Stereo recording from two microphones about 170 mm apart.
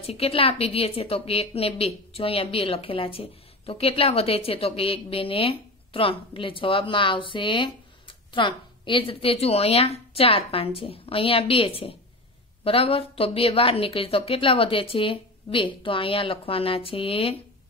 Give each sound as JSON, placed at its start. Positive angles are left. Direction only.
{"t": 0.0, "sound": "a woman's voice", "side_deg": 35}